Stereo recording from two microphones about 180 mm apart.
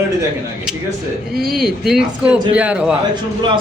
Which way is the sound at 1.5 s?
Centre (ahead or behind).